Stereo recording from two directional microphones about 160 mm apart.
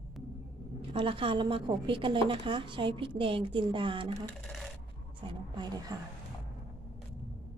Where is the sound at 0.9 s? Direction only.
35° right (ahead or behind).